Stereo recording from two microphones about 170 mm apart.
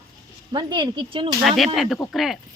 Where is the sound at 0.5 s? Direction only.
25° right (ahead or behind).